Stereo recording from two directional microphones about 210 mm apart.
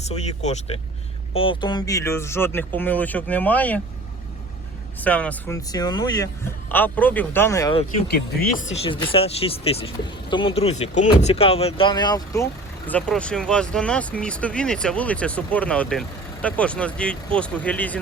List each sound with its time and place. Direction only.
0.1 s speech: 30° left (ahead or behind); by 3.8 s 5° left (ahead or behind)
4.9 s speech: 5° left (ahead or behind)
5.6 s speech: 20° left (ahead or behind)
8.0 s speech: 45° left (ahead or behind)
8.7 s speech: 25° left (ahead or behind)
12.9 s speech: 5° left (ahead or behind)